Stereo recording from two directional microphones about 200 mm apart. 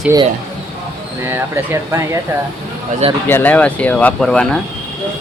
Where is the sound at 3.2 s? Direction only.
10° left (ahead or behind).